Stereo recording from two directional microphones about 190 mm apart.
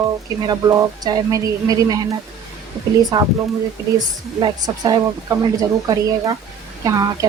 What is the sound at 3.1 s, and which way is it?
A woman's voice, 20° right (ahead or behind).